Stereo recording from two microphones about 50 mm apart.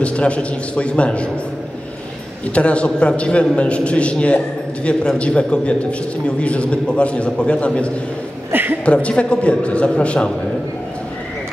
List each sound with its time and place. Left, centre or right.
0.0 s a man's voice: left
2.5 s a man's voice: left
8.5 s a sound: right
8.8 s a man's voice: left